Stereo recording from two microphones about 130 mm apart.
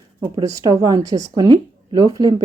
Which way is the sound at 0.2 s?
30° right (ahead or behind).